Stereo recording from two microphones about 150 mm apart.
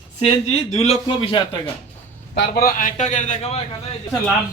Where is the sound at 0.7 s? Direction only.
45° left (ahead or behind).